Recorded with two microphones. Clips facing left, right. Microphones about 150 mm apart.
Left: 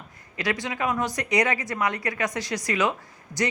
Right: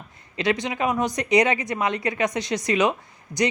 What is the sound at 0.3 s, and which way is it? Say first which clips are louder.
Speech: right 4 dB; 20° right (ahead or behind).